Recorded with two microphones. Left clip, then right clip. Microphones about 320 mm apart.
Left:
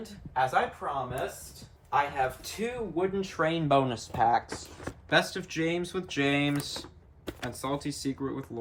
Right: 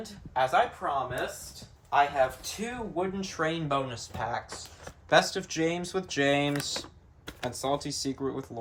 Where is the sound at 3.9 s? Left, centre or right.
Centre.